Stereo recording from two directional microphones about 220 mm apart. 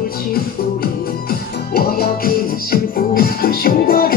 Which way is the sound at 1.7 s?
45° left (ahead or behind).